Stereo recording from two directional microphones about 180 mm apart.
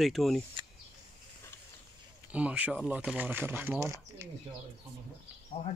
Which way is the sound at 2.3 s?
5° right (ahead or behind).